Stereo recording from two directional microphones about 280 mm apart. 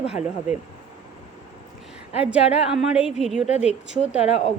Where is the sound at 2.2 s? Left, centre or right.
Centre.